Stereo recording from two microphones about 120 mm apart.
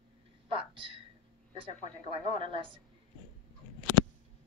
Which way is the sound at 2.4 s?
45° right (ahead or behind).